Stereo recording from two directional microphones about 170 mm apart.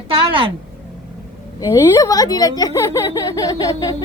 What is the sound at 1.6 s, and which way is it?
Speech, 20° left (ahead or behind).